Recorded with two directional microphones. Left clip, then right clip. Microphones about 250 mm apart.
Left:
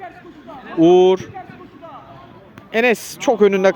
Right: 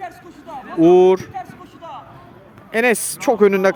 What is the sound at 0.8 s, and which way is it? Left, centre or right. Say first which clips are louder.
Speech: even; centre.